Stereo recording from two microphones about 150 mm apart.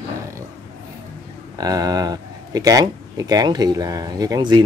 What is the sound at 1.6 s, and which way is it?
Speech, 25° right (ahead or behind).